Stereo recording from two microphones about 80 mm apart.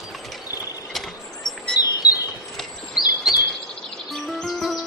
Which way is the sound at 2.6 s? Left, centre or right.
Centre.